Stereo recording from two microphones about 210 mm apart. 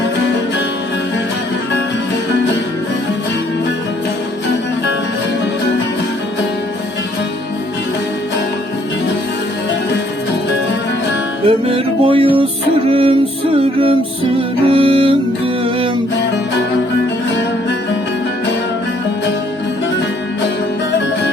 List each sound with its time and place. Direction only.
11.4 s music: 25° right (ahead or behind)